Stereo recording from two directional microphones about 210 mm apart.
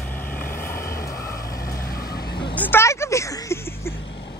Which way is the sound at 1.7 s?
45° left (ahead or behind).